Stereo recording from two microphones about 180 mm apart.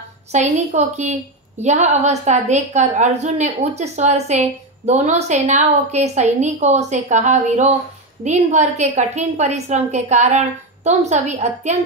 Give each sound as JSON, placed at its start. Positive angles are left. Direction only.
{"t": 0.3, "sound": "a woman's voice", "side_deg": -40}